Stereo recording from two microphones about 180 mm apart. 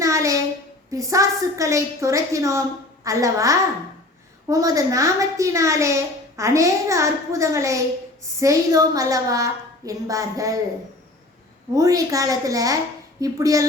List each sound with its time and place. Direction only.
0.0 s a sound: 15° right (ahead or behind)
0.9 s a woman's voice: 20° right (ahead or behind)
11.7 s a woman's voice: 20° right (ahead or behind)